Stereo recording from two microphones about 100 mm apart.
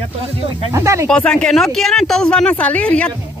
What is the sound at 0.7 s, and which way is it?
Speech, 30° right (ahead or behind).